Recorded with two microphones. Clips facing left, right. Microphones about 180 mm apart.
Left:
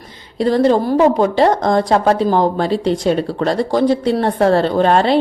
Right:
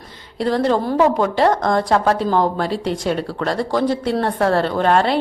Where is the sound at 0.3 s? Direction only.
15° left (ahead or behind).